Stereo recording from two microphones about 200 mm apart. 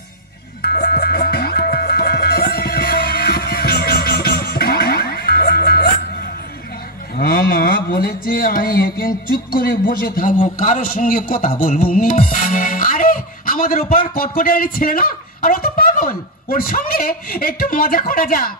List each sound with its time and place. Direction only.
0.6 s music: 50° left (ahead or behind)
7.2 s speech: 50° left (ahead or behind)